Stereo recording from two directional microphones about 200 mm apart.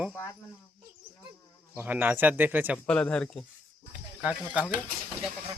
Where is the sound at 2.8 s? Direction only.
5° left (ahead or behind).